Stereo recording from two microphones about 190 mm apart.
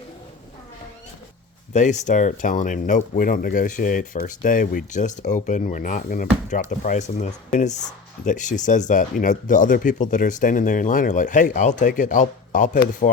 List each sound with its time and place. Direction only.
1.7 s speech: 40° left (ahead or behind)